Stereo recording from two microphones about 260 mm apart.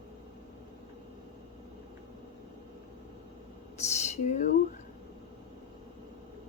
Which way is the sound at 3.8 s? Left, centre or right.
Left.